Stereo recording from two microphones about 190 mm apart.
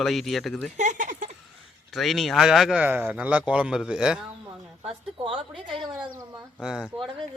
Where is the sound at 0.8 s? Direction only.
40° right (ahead or behind).